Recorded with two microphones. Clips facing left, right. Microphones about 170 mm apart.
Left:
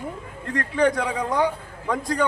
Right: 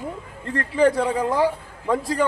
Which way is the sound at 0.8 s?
5° right (ahead or behind).